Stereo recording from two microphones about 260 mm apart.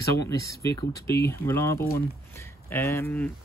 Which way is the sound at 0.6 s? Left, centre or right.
Centre.